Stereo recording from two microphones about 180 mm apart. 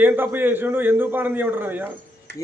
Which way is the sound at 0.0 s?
10° right (ahead or behind).